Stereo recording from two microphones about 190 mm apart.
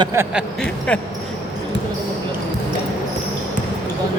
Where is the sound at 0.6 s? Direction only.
5° left (ahead or behind).